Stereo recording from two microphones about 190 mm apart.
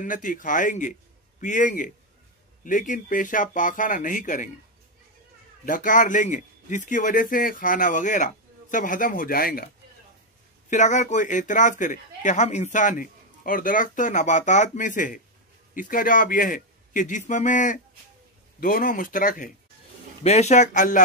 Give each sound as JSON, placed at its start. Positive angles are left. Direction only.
{"t": 0.0, "sound": "a man's voice", "side_deg": 45}
{"t": 5.7, "sound": "a man's voice", "side_deg": 45}
{"t": 10.7, "sound": "a man's voice", "side_deg": 40}